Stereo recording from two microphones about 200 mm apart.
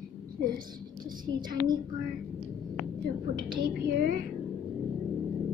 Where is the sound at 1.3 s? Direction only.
20° right (ahead or behind).